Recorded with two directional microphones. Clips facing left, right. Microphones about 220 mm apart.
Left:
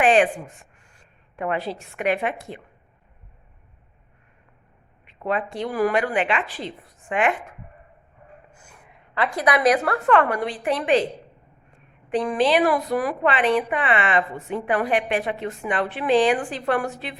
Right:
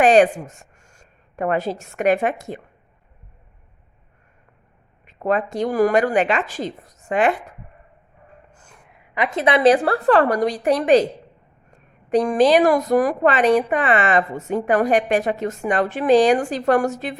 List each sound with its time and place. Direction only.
0.0 s a woman's voice: 40° right (ahead or behind)
5.0 s a woman's voice: 45° right (ahead or behind)
8.6 s a sound: centre (ahead or behind)
9.1 s a woman's voice: 20° right (ahead or behind); by 17.2 s 45° right (ahead or behind)